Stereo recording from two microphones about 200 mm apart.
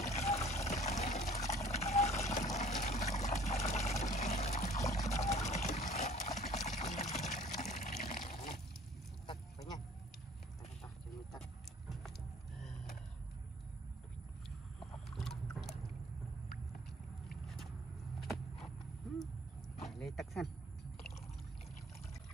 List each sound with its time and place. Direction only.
0.0 s trickle: 35° left (ahead or behind)
0.7 s water: 35° left (ahead or behind)
4.9 s trickle: 35° left (ahead or behind)
5.3 s water: 35° left (ahead or behind)
9.3 s duck: 20° left (ahead or behind)
14.8 s boat: centre (ahead or behind)
18.2 s walk: centre (ahead or behind)
20.0 s a sound: centre (ahead or behind)